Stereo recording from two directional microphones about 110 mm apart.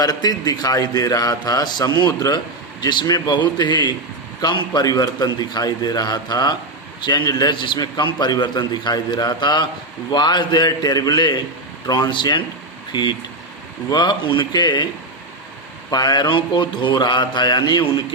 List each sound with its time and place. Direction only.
0.0 s a man's voice: 35° left (ahead or behind)
15.9 s a man's voice: 40° left (ahead or behind)